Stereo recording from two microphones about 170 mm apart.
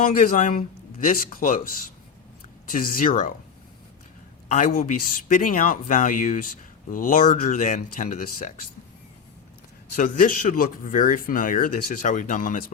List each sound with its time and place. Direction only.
0.0 s speech: 50° left (ahead or behind)
4.5 s speech: 55° left (ahead or behind)
9.9 s speech: 50° left (ahead or behind)